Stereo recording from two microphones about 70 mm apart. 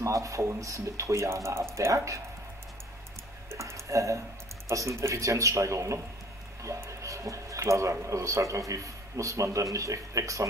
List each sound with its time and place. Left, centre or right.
0.0 s speech: right
3.4 s tick-tock: right
4.6 s speech: right